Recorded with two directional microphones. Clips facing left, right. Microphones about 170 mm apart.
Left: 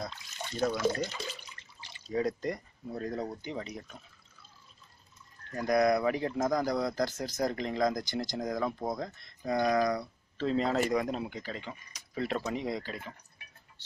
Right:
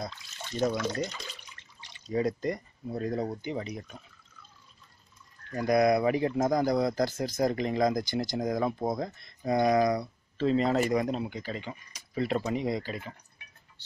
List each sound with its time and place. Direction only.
0.6 s speech: 5° left (ahead or behind); by 4.0 s 10° right (ahead or behind)
5.6 s speech: 10° right (ahead or behind)
6.3 s speech: 20° right (ahead or behind)
7.0 s speech: 10° right (ahead or behind)
10.3 s speech: 5° right (ahead or behind)